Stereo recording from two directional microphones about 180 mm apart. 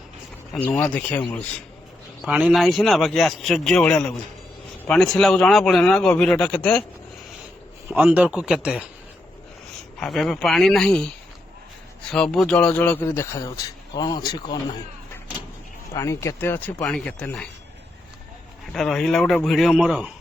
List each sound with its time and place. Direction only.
0.5 s a man's voice: 5° left (ahead or behind)
2.2 s a man's voice: 5° right (ahead or behind)
7.9 s a man's voice: 10° right (ahead or behind)
10.0 s a man's voice: centre (ahead or behind)
12.1 s a man's voice: centre (ahead or behind); by 14.8 s 25° left (ahead or behind)
16.0 s a man's voice: 15° left (ahead or behind)
18.7 s a man's voice: centre (ahead or behind)